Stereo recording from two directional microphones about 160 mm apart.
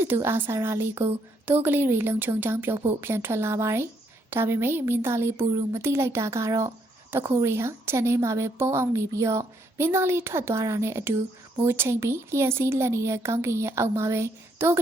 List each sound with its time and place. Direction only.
0.0 s speech: 15° right (ahead or behind)